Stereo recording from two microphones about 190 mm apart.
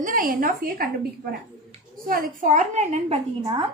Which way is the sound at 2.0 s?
45° right (ahead or behind).